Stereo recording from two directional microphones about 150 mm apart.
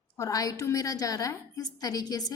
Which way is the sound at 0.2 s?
20° left (ahead or behind).